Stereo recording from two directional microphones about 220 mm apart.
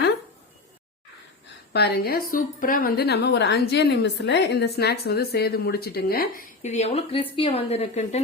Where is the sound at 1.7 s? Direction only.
45° left (ahead or behind).